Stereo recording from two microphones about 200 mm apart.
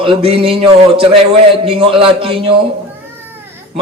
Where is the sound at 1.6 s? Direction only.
25° right (ahead or behind).